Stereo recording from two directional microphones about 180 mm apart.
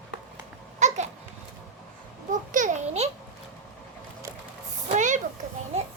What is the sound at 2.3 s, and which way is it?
Babbling, 45° right (ahead or behind).